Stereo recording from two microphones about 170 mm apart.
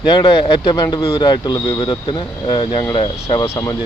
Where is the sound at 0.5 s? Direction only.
25° left (ahead or behind).